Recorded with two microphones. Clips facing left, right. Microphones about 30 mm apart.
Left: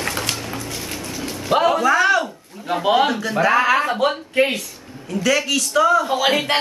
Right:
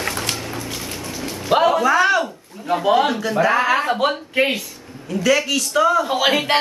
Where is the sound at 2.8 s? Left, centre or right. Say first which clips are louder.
Even; centre.